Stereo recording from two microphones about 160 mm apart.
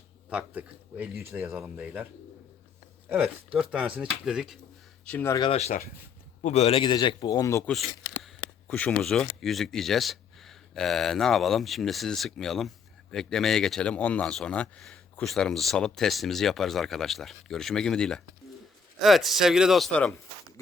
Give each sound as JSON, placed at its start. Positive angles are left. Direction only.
{"t": 0.3, "sound": "speech", "side_deg": -10}
{"t": 3.1, "sound": "speech", "side_deg": -10}
{"t": 5.0, "sound": "speech", "side_deg": 10}
{"t": 5.4, "sound": "a man's voice", "side_deg": 40}
{"t": 7.7, "sound": "a sound", "side_deg": 0}
{"t": 8.7, "sound": "speech", "side_deg": 5}